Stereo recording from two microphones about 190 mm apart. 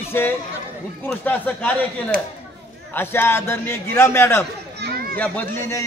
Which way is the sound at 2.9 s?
10° left (ahead or behind).